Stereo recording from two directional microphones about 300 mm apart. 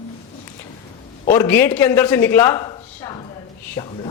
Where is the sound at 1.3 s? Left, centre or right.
Centre.